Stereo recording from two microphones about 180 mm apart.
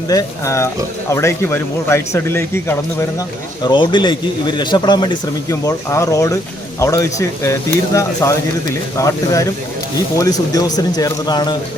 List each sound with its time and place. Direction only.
0.1 s speech: 20° left (ahead or behind)
3.6 s speech: 25° left (ahead or behind)